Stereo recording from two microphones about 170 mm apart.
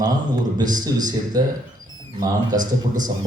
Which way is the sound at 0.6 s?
25° right (ahead or behind).